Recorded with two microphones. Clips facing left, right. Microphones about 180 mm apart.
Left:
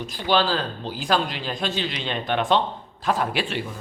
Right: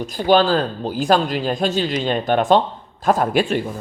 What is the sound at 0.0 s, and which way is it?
A man's voice, 45° right (ahead or behind).